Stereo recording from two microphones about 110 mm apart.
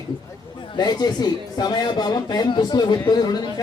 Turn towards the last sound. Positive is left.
turn(degrees=40)  # may be behind; listen again after turning